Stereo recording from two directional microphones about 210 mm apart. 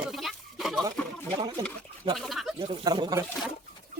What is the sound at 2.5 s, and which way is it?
Speech, 20° right (ahead or behind).